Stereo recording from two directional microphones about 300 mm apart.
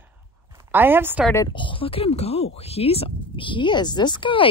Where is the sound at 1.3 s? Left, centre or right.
Centre.